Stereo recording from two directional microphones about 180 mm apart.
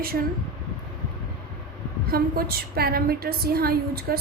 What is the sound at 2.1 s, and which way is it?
A woman's voice, 55° right (ahead or behind).